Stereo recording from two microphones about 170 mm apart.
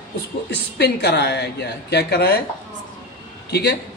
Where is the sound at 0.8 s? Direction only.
70° left (ahead or behind).